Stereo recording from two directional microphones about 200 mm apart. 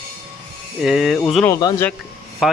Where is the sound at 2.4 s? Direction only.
5° right (ahead or behind).